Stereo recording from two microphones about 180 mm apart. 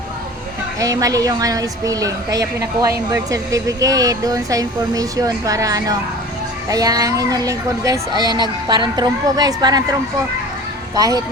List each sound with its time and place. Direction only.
0.8 s a woman's voice: 20° right (ahead or behind)
10.9 s a woman's voice: 20° right (ahead or behind)